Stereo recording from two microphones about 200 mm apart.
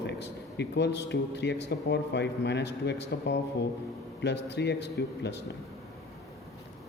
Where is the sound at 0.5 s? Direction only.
55° left (ahead or behind).